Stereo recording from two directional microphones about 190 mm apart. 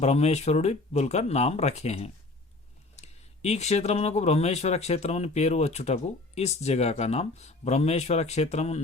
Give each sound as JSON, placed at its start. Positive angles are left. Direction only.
{"t": 0.0, "sound": "speech", "side_deg": 35}
{"t": 3.4, "sound": "speech", "side_deg": 35}